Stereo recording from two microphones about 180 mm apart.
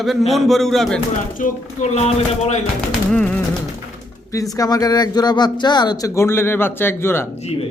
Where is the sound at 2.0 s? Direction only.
35° left (ahead or behind).